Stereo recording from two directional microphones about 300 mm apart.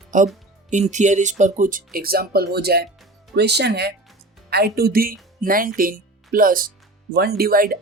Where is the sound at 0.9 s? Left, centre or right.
Right.